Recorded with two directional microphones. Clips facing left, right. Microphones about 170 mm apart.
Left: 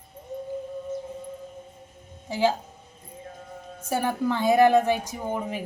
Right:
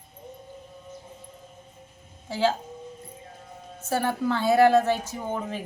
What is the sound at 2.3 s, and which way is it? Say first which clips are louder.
Speech: left 1 dB; 15° left (ahead or behind).